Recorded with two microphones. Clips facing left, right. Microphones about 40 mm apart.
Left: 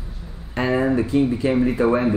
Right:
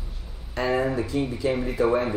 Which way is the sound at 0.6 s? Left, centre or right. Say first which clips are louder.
Left 4 dB; left.